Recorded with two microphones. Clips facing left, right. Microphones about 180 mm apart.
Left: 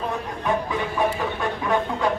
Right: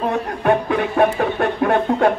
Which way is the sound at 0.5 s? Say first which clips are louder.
Right 7 dB; 65° right (ahead or behind).